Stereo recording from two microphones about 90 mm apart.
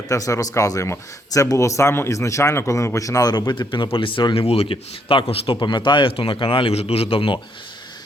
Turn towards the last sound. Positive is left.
turn(degrees=90)